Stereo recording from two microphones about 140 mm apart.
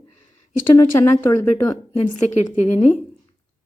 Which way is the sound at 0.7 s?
15° left (ahead or behind).